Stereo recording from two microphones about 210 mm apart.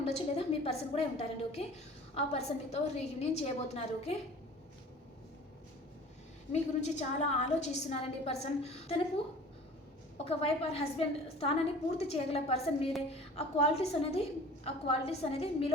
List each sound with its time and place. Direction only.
0.1 s a woman's voice: 30° left (ahead or behind)
6.5 s a woman's voice: 35° left (ahead or behind)
10.2 s a woman's voice: 30° left (ahead or behind)